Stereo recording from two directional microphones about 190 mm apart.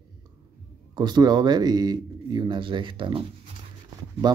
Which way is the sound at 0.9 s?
20° right (ahead or behind).